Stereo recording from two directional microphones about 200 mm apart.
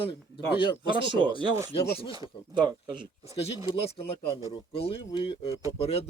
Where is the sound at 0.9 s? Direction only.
25° right (ahead or behind).